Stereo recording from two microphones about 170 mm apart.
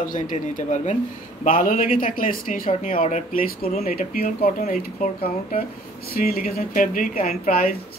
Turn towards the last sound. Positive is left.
turn(degrees=55)  # may be behind; listen again after turning